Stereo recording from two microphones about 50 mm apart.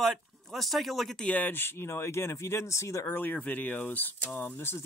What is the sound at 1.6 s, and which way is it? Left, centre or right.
Speech, left.